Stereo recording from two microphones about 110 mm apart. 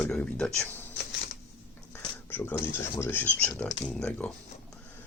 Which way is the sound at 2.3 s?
20° left (ahead or behind).